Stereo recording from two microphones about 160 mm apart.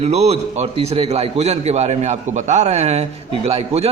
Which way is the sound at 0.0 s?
40° right (ahead or behind).